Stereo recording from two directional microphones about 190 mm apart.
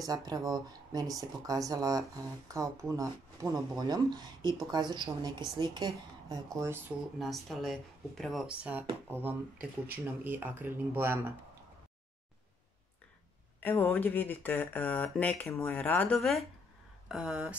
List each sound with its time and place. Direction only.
0.0 s speech: 20° right (ahead or behind)
7.2 s speech: centre (ahead or behind)
13.6 s speech: 10° left (ahead or behind); by 17.6 s 5° right (ahead or behind)